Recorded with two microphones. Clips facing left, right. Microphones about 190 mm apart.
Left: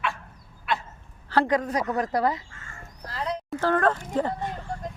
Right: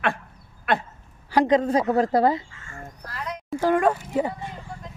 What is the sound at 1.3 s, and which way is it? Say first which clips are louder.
A woman's voice: right 4 dB; 20° right (ahead or behind).